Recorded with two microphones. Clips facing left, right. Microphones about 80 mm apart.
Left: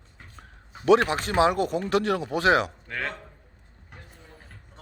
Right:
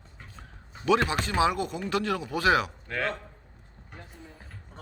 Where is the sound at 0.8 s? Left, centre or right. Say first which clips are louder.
Left 5 dB; left.